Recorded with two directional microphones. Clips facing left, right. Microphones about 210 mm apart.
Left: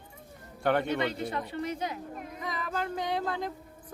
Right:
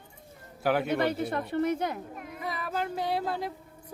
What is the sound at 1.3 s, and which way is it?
Speech, 55° right (ahead or behind).